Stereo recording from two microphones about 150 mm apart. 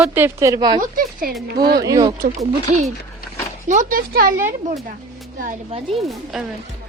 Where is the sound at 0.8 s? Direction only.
70° right (ahead or behind).